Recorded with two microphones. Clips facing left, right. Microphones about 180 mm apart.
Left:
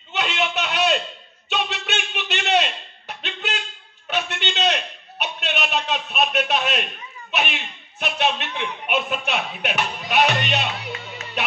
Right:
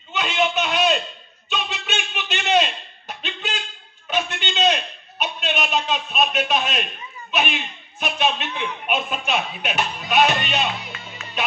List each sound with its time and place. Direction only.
0.1 s a sound: 65° left (ahead or behind)
8.0 s a man's voice: 65° left (ahead or behind)
11.4 s music: 65° left (ahead or behind)